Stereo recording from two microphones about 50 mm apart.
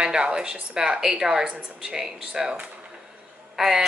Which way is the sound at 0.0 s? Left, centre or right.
Centre.